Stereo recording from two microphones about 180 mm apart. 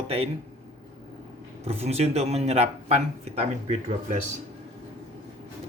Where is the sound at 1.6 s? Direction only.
35° right (ahead or behind).